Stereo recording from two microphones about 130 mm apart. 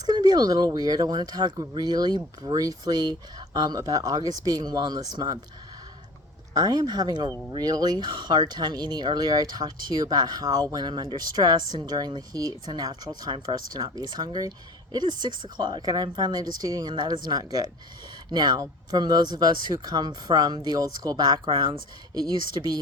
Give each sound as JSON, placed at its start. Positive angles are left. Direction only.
{"t": 0.0, "sound": "speech", "side_deg": -30}
{"t": 6.6, "sound": "speech", "side_deg": -30}